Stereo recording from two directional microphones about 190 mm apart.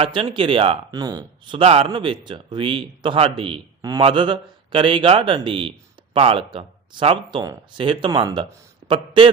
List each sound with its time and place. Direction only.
0.0 s speech: 25° right (ahead or behind)